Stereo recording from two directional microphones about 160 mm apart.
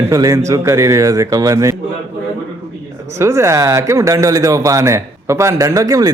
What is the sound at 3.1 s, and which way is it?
Speech, 15° right (ahead or behind).